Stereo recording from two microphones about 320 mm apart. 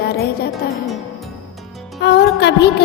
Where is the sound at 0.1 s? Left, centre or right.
Left.